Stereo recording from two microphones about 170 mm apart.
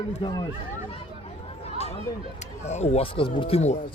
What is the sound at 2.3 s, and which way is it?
Speech, 40° left (ahead or behind).